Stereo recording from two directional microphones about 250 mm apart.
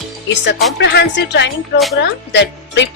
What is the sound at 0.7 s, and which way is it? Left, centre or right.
A woman's voice, left.